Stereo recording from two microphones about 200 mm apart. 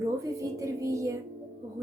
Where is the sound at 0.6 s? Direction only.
15° right (ahead or behind).